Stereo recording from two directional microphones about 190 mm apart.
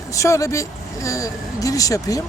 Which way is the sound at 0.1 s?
15° left (ahead or behind).